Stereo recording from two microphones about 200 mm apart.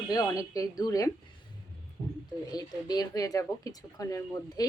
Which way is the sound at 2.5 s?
20° left (ahead or behind).